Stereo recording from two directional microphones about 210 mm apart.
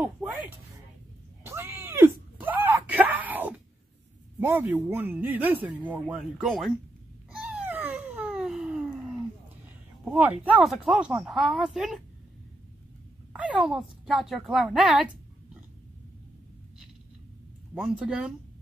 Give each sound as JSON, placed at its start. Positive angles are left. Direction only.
{"t": 0.0, "sound": "music", "side_deg": -5}
{"t": 1.4, "sound": "a sound", "side_deg": -10}
{"t": 4.4, "sound": "a man's voice", "side_deg": -10}
{"t": 7.3, "sound": "babbling", "side_deg": -5}
{"t": 10.0, "sound": "a woman's voice", "side_deg": -5}
{"t": 13.3, "sound": "a woman's voice", "side_deg": -5}
{"t": 17.7, "sound": "a woman's voice", "side_deg": -5}